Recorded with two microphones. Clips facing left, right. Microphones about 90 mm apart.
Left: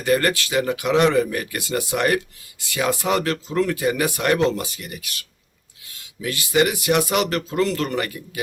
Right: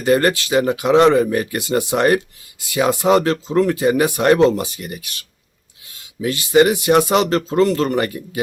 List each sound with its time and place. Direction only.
0.0 s speech: 25° right (ahead or behind)